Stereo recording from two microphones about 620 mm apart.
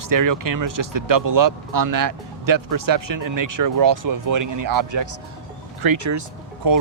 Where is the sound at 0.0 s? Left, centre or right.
Right.